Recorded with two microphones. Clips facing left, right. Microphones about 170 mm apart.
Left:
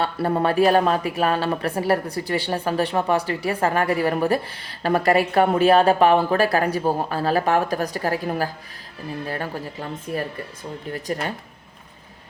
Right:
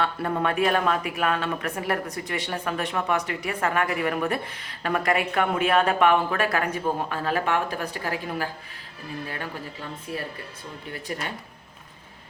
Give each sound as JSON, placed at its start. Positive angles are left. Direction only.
{"t": 0.0, "sound": "a woman's voice", "side_deg": 35}